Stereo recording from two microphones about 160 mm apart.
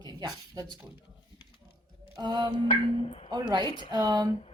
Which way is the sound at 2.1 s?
30° right (ahead or behind).